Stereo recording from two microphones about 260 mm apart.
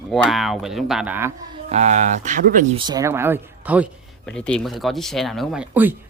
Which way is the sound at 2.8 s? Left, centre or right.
Centre.